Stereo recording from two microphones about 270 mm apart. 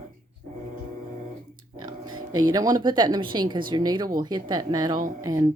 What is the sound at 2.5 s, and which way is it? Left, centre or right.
Speech, centre.